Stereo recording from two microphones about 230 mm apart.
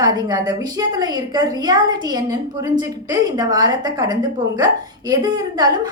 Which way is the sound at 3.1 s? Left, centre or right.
Centre.